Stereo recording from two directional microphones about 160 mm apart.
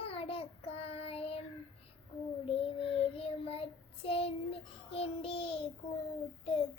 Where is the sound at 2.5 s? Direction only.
35° left (ahead or behind).